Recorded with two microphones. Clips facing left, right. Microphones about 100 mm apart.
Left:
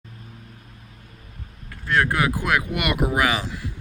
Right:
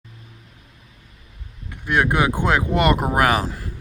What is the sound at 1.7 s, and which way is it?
Speech, 20° right (ahead or behind).